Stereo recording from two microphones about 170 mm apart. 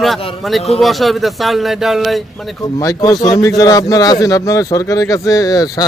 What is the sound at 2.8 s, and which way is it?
A man's voice, 25° left (ahead or behind).